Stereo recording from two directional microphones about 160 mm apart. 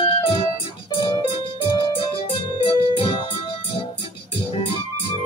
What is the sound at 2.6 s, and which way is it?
Music, 35° left (ahead or behind).